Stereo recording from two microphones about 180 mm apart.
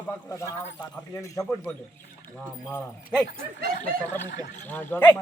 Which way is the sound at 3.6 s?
55° right (ahead or behind).